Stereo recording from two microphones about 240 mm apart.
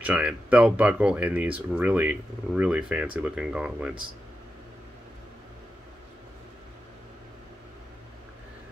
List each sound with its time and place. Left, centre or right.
0.0 s speech: centre